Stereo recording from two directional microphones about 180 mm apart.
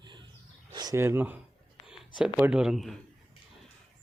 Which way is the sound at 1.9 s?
5° right (ahead or behind).